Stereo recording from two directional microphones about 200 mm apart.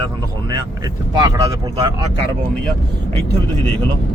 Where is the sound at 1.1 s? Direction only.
20° right (ahead or behind).